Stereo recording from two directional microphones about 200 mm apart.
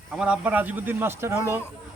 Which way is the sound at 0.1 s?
5° right (ahead or behind).